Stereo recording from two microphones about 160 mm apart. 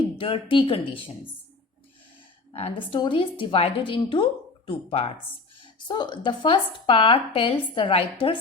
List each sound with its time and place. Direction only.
0.2 s a woman's voice: 35° left (ahead or behind)
2.5 s a woman's voice: 35° left (ahead or behind)